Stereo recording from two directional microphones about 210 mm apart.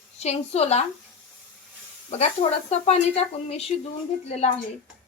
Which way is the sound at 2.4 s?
30° left (ahead or behind).